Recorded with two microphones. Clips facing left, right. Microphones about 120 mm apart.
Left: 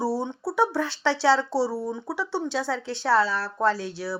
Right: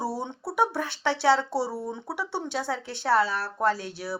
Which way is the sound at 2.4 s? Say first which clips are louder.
Left 3 dB; 50° right (ahead or behind).